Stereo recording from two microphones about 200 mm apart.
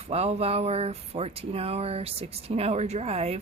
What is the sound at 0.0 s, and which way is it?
Speech, 30° right (ahead or behind).